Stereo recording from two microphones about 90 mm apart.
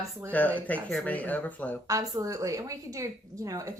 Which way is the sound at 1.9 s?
40° right (ahead or behind).